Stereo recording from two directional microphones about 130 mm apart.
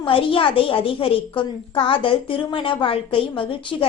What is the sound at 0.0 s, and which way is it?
A woman's voice, 45° left (ahead or behind).